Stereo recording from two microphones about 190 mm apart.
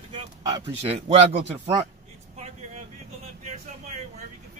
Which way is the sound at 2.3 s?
35° right (ahead or behind).